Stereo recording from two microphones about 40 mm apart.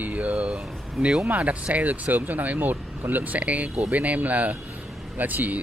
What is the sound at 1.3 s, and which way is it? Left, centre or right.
Speech, right.